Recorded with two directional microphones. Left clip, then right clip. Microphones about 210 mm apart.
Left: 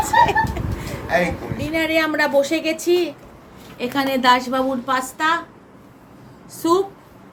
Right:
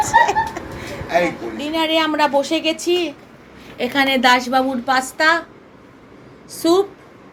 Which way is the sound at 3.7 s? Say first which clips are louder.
Right 4 dB; 15° right (ahead or behind).